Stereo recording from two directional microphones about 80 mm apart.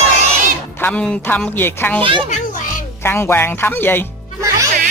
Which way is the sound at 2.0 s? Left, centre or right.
Right.